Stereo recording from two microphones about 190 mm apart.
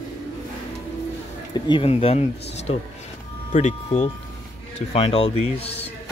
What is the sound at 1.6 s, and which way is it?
Speech, 30° left (ahead or behind).